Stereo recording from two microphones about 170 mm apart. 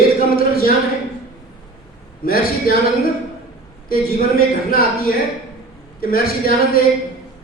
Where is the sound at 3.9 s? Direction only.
60° left (ahead or behind).